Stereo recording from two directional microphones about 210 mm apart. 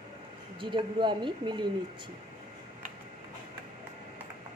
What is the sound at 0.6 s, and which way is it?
Speech, 20° right (ahead or behind).